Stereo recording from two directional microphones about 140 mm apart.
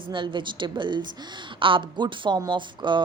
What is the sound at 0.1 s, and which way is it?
A woman's voice, 35° right (ahead or behind).